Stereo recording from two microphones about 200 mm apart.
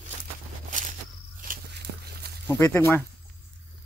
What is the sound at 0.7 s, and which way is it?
Walk, 40° right (ahead or behind).